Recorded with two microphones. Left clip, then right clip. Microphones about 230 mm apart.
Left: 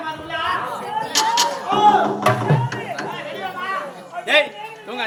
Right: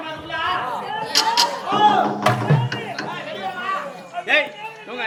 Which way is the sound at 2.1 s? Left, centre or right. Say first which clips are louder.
Left 1 dB; centre.